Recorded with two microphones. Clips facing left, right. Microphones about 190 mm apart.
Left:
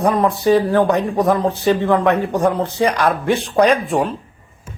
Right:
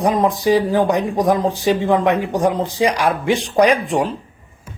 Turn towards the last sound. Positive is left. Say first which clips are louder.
# even
turn(degrees=-15)  # may be behind; listen again after turning